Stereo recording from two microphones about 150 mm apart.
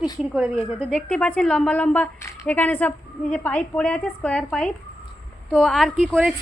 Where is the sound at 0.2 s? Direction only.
5° right (ahead or behind).